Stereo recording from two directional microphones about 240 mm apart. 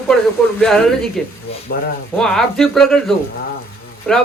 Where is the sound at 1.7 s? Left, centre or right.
Left.